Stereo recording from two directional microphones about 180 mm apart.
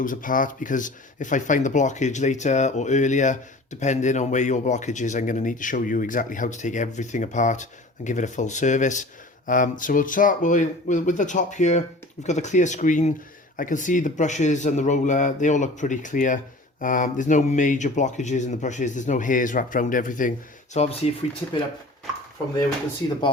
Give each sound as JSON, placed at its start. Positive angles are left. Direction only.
{"t": 0.0, "sound": "speech", "side_deg": 50}
{"t": 20.7, "sound": "speech", "side_deg": 35}